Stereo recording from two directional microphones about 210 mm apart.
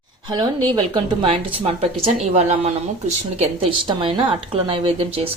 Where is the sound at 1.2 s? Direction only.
30° right (ahead or behind).